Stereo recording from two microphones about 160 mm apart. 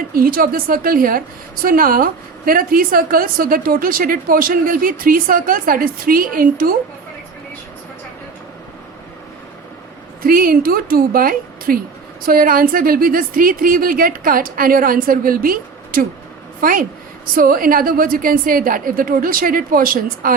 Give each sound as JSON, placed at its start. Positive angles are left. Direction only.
{"t": 0.1, "sound": "a woman's voice", "side_deg": -65}
{"t": 10.2, "sound": "a woman's voice", "side_deg": -65}